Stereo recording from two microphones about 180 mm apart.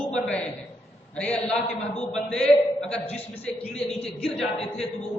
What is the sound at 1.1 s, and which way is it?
A man's voice, 5° left (ahead or behind).